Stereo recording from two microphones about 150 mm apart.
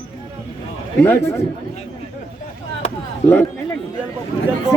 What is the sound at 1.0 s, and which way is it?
Speech, 10° left (ahead or behind).